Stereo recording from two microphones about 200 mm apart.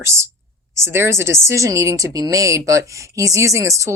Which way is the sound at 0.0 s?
15° right (ahead or behind).